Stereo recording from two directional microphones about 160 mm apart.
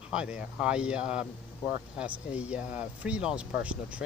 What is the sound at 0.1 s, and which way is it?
Speech, 5° right (ahead or behind).